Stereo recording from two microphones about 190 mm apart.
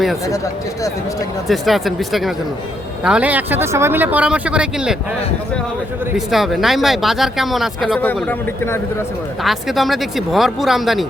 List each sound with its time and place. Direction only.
1.5 s speech: centre (ahead or behind)
6.1 s speech: centre (ahead or behind)
9.4 s speech: centre (ahead or behind)